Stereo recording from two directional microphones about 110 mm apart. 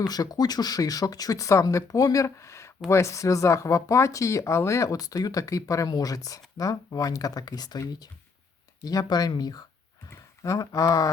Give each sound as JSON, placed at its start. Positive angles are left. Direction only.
{"t": 0.0, "sound": "speech", "side_deg": 35}